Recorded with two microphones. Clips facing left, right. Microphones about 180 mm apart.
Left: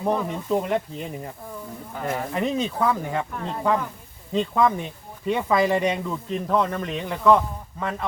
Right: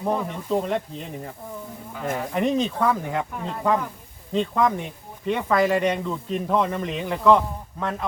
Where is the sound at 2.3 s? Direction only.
Centre (ahead or behind).